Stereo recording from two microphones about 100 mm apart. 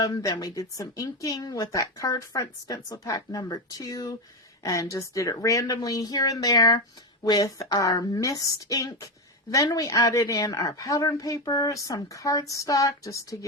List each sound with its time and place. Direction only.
0.0 s speech: 40° left (ahead or behind)